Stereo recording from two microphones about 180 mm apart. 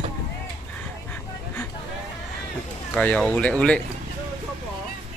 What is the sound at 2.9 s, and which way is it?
Speech, 5° left (ahead or behind).